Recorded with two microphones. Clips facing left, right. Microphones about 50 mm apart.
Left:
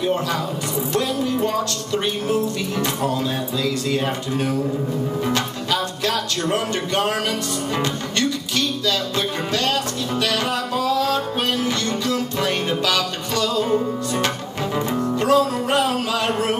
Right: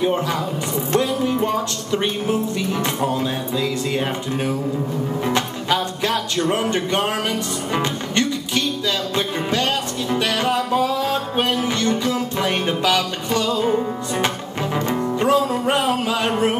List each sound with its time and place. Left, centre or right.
0.0 s music: centre